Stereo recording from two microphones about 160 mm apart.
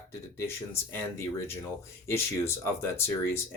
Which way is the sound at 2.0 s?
15° left (ahead or behind).